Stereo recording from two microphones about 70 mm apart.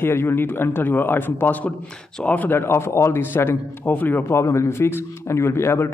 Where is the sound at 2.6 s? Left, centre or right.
Left.